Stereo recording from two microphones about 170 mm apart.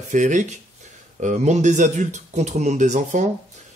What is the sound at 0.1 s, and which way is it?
Speech, 50° right (ahead or behind).